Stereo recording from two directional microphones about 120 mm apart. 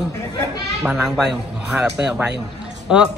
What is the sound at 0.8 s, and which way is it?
A man's voice, 10° right (ahead or behind).